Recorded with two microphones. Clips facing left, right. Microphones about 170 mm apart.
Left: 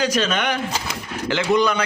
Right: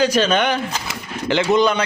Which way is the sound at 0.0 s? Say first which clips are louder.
Right 4 dB; 30° right (ahead or behind).